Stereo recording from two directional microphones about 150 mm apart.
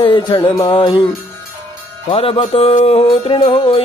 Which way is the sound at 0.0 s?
35° left (ahead or behind).